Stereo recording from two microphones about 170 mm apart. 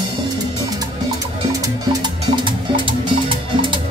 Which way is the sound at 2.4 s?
30° right (ahead or behind).